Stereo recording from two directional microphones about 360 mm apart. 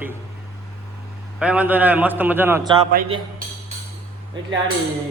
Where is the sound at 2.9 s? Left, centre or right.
Right.